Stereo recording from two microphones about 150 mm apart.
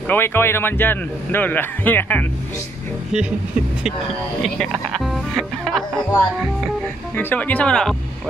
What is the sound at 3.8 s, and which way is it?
Speech, 5° right (ahead or behind).